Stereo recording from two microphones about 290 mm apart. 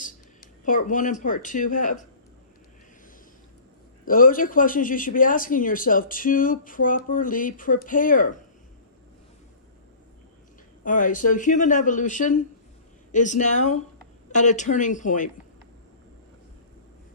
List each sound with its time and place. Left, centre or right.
0.6 s a man's voice: left
4.0 s a man's voice: left
10.8 s a man's voice: left